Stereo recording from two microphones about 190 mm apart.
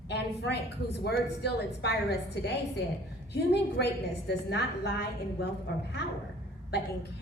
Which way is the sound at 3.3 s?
60° left (ahead or behind).